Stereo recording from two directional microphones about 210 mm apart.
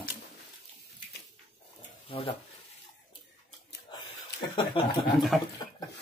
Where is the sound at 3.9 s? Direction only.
20° left (ahead or behind).